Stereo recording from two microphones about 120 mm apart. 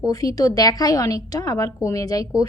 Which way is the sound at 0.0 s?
30° left (ahead or behind).